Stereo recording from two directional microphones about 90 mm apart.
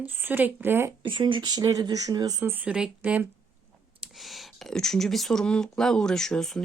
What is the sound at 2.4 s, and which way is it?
Speech, 20° right (ahead or behind).